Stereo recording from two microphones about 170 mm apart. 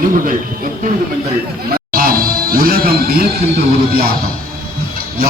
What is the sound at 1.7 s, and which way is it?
Music, 60° right (ahead or behind).